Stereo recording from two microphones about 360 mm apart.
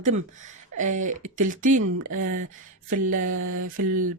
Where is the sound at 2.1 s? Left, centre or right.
Right.